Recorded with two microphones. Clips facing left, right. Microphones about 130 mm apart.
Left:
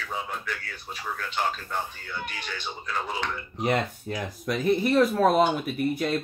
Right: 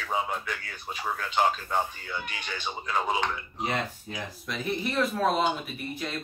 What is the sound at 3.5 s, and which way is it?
Speech, 65° left (ahead or behind).